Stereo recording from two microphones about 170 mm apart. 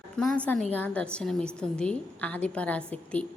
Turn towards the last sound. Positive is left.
turn(degrees=5)  # may be behind; listen again after turning